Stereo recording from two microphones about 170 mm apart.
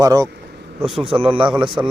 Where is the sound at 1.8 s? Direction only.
20° right (ahead or behind).